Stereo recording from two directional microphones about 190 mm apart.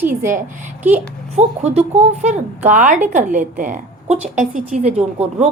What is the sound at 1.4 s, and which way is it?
Speech, 35° right (ahead or behind).